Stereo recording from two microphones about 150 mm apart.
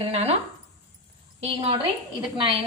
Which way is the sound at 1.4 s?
35° right (ahead or behind).